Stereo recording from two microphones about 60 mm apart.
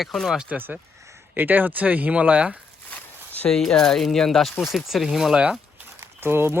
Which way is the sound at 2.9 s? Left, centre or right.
Left.